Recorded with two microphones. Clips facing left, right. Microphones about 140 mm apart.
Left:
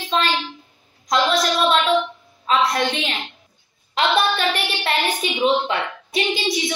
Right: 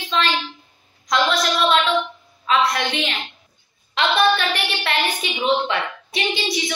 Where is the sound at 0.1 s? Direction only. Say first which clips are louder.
Left 1 dB; 40° left (ahead or behind).